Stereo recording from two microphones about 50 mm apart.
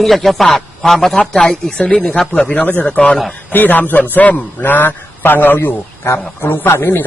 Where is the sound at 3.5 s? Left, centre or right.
Left.